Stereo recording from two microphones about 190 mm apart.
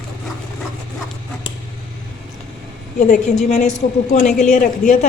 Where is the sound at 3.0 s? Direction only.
40° left (ahead or behind).